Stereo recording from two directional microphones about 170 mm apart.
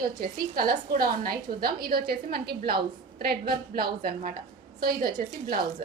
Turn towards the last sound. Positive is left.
turn(degrees=-60)  # may be behind; listen again after turning